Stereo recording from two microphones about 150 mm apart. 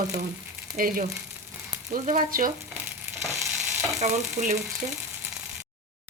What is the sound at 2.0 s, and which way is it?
Speech, 65° right (ahead or behind).